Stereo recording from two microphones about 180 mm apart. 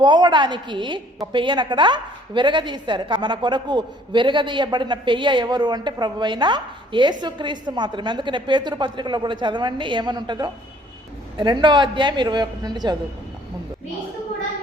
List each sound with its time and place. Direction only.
0.0 s a woman's voice: 25° right (ahead or behind)